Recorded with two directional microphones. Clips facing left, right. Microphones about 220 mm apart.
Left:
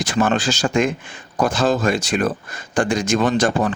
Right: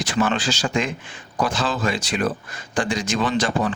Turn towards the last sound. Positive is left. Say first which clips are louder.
# left 4 dB
turn(degrees=45)  # may be behind; listen again after turning